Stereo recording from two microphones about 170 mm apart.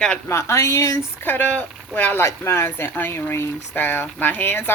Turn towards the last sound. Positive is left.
turn(degrees=10)  # may be behind; listen again after turning